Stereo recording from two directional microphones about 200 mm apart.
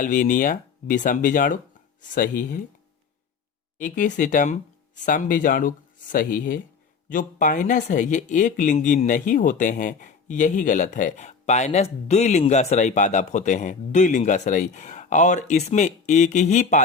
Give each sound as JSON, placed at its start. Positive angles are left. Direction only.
{"t": 0.0, "sound": "speech", "side_deg": 40}
{"t": 3.8, "sound": "speech", "side_deg": 40}